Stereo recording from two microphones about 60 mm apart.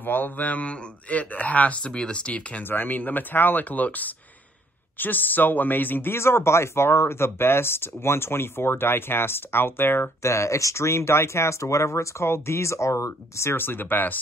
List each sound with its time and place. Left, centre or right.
0.0 s speech: left
2.7 s speech: left
6.1 s speech: left
10.3 s speech: left
13.6 s speech: left